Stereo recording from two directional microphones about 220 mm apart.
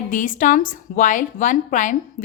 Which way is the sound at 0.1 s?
35° left (ahead or behind).